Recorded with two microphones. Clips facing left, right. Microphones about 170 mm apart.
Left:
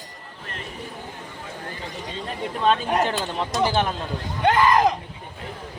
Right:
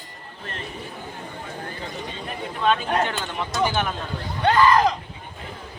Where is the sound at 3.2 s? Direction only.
30° left (ahead or behind).